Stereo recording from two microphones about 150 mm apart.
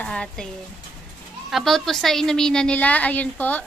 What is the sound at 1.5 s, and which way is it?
A woman's voice, centre (ahead or behind).